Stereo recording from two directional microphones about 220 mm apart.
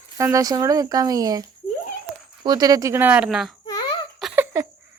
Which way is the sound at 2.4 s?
20° right (ahead or behind).